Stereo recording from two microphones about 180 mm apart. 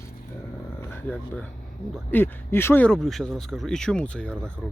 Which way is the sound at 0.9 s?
10° left (ahead or behind).